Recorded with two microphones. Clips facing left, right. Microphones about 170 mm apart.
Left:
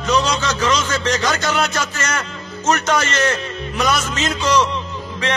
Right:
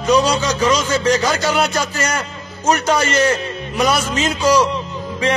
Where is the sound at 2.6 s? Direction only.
10° right (ahead or behind).